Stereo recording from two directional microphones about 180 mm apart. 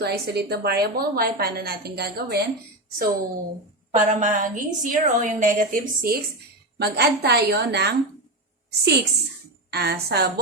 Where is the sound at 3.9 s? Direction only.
45° right (ahead or behind).